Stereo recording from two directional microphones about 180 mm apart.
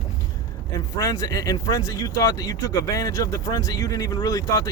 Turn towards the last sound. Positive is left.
turn(degrees=20)  # may be behind; listen again after turning